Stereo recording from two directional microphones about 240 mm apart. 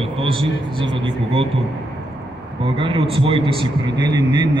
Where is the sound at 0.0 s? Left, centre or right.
Right.